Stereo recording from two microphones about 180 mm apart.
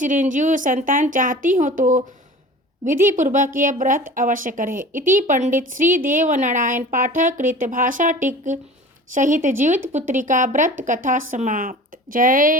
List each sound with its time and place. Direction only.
0.0 s a woman's voice: 45° right (ahead or behind)